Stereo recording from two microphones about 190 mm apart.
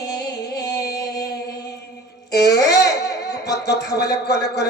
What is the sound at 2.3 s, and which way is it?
Speech, 60° left (ahead or behind).